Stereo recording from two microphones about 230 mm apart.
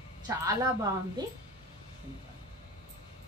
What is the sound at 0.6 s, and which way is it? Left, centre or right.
Speech, centre.